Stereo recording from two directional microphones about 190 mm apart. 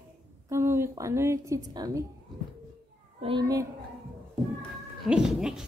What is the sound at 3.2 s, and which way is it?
Speech, 25° right (ahead or behind).